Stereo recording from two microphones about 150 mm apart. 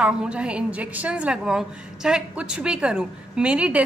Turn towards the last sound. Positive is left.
turn(degrees=-10)  # may be behind; listen again after turning